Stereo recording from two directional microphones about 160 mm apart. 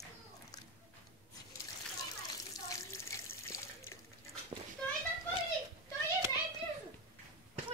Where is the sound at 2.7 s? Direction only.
20° left (ahead or behind).